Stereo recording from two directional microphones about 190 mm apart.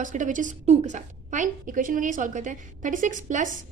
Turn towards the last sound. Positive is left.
turn(degrees=-40)  # may be behind; listen again after turning